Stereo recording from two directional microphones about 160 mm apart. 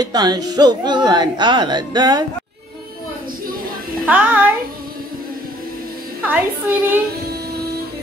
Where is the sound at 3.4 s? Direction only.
65° right (ahead or behind).